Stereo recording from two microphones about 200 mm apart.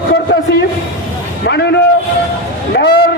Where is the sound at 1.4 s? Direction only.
55° left (ahead or behind).